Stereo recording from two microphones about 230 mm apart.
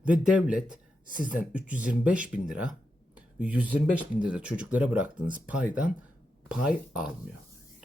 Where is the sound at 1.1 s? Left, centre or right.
Left.